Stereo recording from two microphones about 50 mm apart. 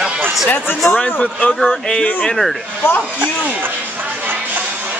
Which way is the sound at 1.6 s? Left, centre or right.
Centre.